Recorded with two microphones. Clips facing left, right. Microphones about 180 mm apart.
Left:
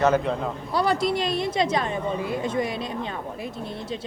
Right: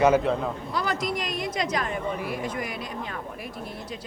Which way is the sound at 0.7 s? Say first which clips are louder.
Left 8 dB; 30° left (ahead or behind).